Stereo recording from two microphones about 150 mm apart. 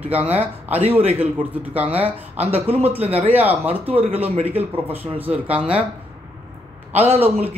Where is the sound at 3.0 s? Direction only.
40° right (ahead or behind).